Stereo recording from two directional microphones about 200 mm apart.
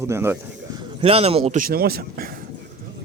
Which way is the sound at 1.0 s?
30° right (ahead or behind).